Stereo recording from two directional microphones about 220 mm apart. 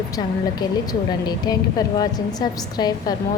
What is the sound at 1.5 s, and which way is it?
Speech, 20° left (ahead or behind).